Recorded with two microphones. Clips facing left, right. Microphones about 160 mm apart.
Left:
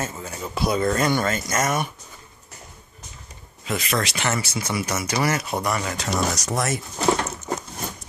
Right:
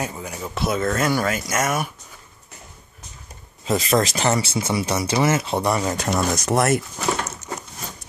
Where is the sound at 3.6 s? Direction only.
35° right (ahead or behind).